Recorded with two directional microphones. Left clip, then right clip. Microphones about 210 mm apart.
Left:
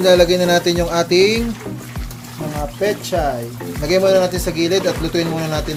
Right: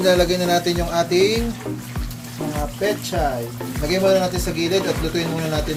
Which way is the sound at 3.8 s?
50° left (ahead or behind).